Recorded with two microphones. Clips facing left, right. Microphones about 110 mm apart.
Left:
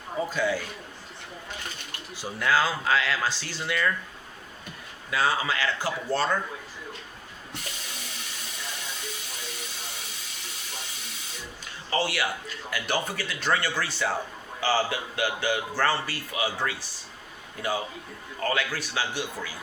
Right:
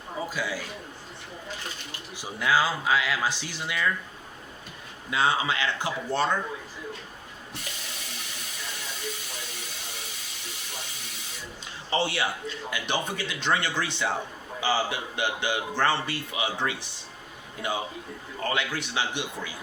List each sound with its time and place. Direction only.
0.3 s speech: 10° right (ahead or behind)
2.1 s speech: 10° right (ahead or behind)
5.1 s speech: 25° right (ahead or behind)
11.9 s speech: 25° right (ahead or behind)